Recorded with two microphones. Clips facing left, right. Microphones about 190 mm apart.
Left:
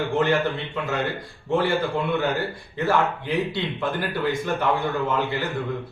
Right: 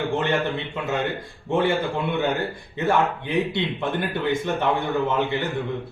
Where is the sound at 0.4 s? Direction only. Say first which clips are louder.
Even; 20° right (ahead or behind).